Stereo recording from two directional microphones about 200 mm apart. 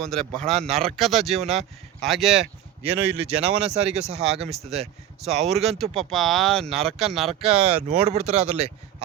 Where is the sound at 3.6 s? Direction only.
30° right (ahead or behind).